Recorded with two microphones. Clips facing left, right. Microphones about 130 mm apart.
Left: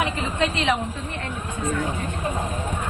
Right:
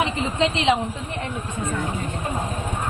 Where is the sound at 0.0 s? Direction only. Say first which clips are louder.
Right 2 dB; 20° right (ahead or behind).